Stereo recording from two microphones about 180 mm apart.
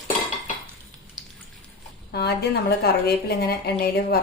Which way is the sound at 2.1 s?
65° left (ahead or behind).